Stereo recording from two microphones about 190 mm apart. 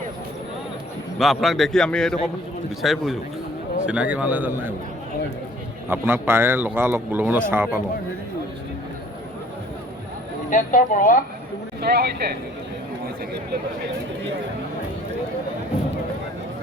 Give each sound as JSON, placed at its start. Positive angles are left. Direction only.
{"t": 1.2, "sound": "a man's voice", "side_deg": 0}
{"t": 5.9, "sound": "speech", "side_deg": -10}
{"t": 10.5, "sound": "speech", "side_deg": 45}
{"t": 11.8, "sound": "speech", "side_deg": -60}